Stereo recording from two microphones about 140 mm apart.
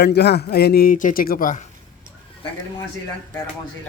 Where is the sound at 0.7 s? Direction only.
90° left.